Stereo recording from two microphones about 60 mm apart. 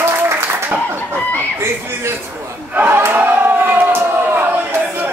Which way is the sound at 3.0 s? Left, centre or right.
Right.